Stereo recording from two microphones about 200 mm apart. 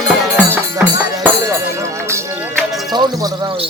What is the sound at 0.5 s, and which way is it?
Music, 10° right (ahead or behind).